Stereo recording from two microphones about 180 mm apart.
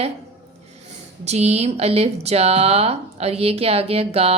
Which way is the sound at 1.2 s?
35° right (ahead or behind).